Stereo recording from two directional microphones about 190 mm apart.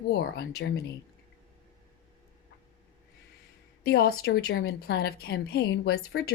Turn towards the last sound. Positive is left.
turn(degrees=55)  # may be behind; listen again after turning